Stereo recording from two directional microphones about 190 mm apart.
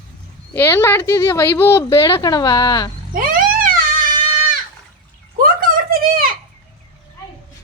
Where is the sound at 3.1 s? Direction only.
50° right (ahead or behind).